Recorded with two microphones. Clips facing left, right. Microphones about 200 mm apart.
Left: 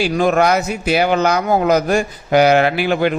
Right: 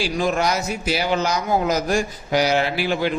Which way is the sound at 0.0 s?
60° left (ahead or behind).